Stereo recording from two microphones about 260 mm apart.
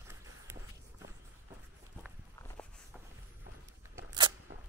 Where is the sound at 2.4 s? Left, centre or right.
Centre.